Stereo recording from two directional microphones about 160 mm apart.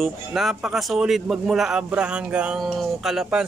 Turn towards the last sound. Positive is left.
turn(degrees=-5)  # may be behind; listen again after turning